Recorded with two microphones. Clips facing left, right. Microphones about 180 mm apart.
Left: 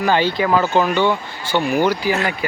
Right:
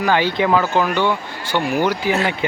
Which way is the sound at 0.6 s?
15° left (ahead or behind).